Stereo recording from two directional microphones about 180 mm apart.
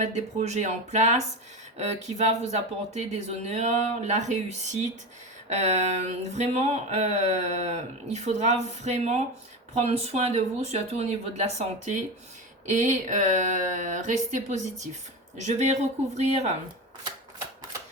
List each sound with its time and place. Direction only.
0.0 s speech: 40° right (ahead or behind)